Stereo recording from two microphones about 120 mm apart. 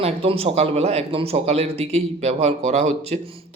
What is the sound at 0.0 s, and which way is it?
A man's voice, 55° right (ahead or behind).